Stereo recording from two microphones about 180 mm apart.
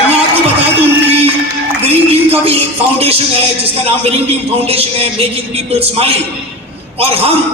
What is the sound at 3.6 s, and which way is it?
A man's voice, 35° right (ahead or behind).